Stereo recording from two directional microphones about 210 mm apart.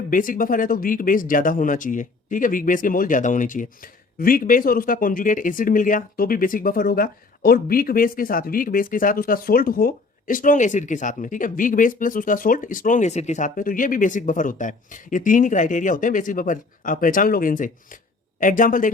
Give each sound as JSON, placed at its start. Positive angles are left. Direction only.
{"t": 0.1, "sound": "speech", "side_deg": 40}